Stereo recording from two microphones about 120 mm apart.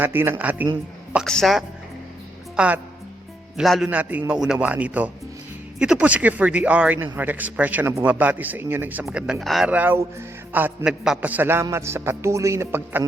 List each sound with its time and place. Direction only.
0.0 s speech: 15° right (ahead or behind)
1.1 s speech: centre (ahead or behind)
2.6 s speech: 10° right (ahead or behind)
3.6 s speech: centre (ahead or behind)
3.8 s speech: 10° right (ahead or behind)
9.6 s a man's voice: 15° right (ahead or behind)